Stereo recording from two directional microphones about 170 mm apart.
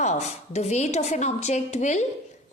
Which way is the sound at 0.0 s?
40° left (ahead or behind).